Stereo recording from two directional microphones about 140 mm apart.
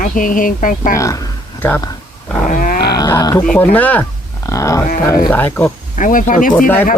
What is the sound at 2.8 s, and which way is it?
Speech, 30° left (ahead or behind).